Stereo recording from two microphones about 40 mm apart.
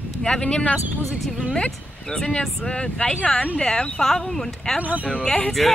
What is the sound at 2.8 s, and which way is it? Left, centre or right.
Speech, left.